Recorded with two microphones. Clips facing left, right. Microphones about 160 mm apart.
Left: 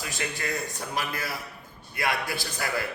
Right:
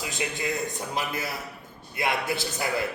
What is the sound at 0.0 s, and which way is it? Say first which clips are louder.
A man's voice: right 2 dB; 20° right (ahead or behind).